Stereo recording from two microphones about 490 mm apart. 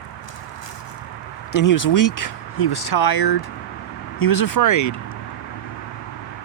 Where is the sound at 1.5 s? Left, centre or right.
Left.